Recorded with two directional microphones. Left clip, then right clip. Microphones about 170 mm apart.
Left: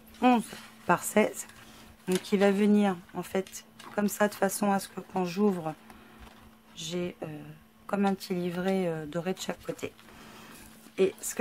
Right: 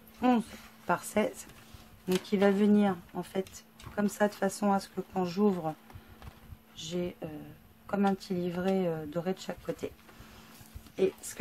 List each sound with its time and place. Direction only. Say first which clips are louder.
0.2 s a woman's voice: left 4 dB; 25° left (ahead or behind)
6.8 s a woman's voice: left 1 dB; 20° left (ahead or behind)